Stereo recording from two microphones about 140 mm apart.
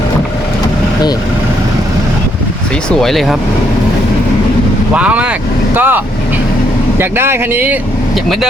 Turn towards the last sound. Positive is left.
turn(degrees=-15)  # may be behind; listen again after turning